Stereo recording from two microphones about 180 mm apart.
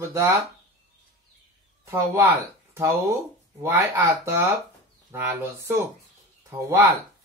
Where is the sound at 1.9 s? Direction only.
15° right (ahead or behind).